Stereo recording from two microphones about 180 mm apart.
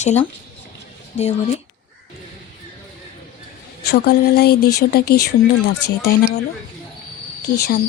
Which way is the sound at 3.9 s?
60° left (ahead or behind).